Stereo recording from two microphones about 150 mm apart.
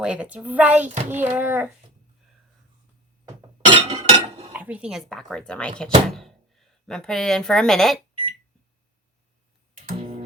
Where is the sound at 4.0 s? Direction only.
45° right (ahead or behind).